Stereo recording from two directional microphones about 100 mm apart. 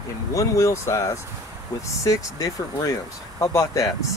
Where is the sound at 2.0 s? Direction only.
35° left (ahead or behind).